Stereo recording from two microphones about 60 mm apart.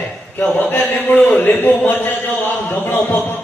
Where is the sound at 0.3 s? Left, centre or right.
Left.